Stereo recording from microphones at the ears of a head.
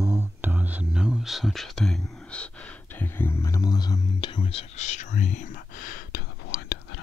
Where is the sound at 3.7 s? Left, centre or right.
Left.